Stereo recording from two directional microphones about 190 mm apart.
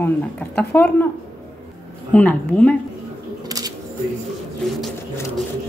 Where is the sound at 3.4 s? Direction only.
20° right (ahead or behind).